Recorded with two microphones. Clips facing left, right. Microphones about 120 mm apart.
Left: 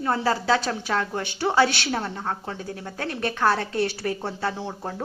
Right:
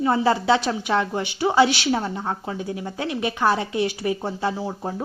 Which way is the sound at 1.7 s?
55° left (ahead or behind).